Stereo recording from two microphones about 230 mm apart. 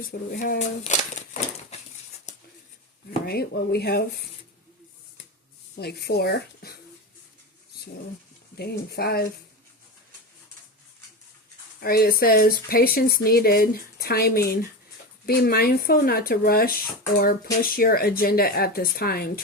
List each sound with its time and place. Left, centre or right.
0.1 s speech: left
3.2 s speech: left
5.7 s speech: left
8.9 s speech: left
11.8 s speech: left